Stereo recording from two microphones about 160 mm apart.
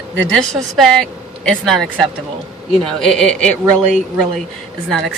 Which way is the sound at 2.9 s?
5° left (ahead or behind).